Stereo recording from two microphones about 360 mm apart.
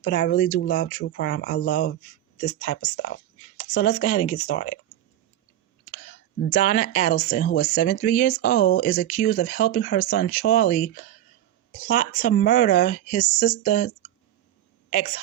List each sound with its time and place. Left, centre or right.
0.0 s speech: left
6.5 s a woman's voice: centre